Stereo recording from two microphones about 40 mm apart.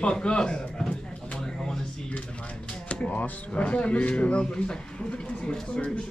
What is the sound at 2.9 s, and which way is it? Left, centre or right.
Speech, left.